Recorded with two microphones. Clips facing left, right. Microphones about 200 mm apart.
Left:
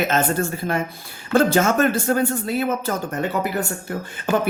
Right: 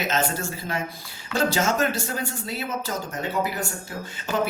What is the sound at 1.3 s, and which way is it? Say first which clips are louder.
Speech: left 6 dB; 55° left (ahead or behind).